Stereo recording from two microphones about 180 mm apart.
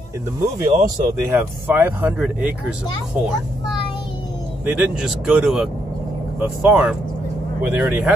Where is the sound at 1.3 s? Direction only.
10° right (ahead or behind).